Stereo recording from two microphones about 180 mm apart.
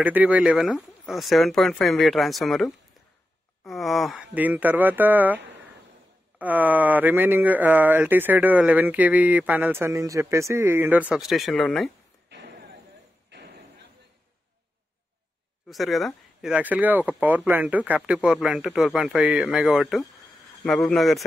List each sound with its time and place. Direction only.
0.0 s speech: 10° right (ahead or behind)
13.3 s thump: 75° right (ahead or behind)
15.7 s speech: centre (ahead or behind)